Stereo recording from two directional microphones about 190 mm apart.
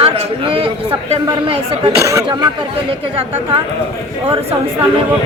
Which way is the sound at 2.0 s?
15° right (ahead or behind).